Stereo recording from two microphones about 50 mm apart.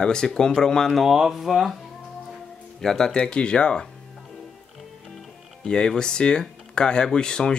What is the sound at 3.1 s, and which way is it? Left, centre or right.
Speech, centre.